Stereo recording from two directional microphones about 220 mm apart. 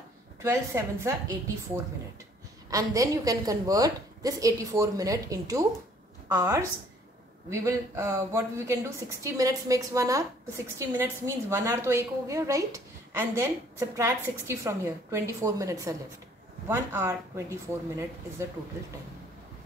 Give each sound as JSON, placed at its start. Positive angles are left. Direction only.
{"t": 0.4, "sound": "a woman's voice", "side_deg": -10}
{"t": 2.7, "sound": "a woman's voice", "side_deg": -15}